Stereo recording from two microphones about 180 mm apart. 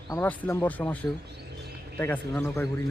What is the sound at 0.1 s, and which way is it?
Speech, 10° left (ahead or behind).